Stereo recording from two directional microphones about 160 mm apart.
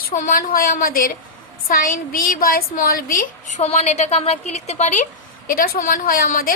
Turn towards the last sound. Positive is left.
turn(degrees=65)  # may be behind; listen again after turning